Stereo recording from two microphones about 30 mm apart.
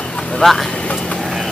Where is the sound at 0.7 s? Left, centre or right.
Left.